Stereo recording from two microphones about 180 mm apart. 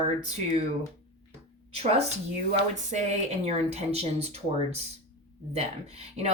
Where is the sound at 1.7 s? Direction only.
35° right (ahead or behind).